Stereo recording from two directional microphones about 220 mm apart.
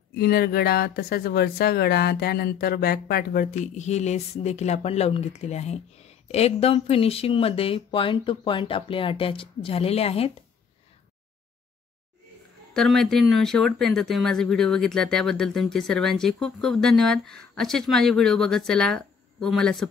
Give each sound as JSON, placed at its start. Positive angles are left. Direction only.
{"t": 0.1, "sound": "speech", "side_deg": 45}
{"t": 12.7, "sound": "speech", "side_deg": 0}